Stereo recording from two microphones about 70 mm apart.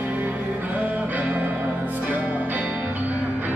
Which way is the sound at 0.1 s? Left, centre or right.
Right.